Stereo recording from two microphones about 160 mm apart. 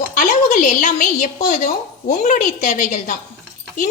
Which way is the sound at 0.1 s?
50° left (ahead or behind).